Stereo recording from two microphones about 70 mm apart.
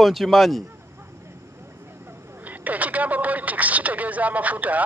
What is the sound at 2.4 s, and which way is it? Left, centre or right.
Speech, right.